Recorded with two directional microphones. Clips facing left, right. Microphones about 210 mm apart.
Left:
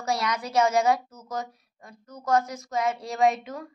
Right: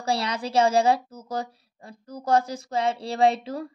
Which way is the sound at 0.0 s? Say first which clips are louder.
Right 1 dB; 30° right (ahead or behind).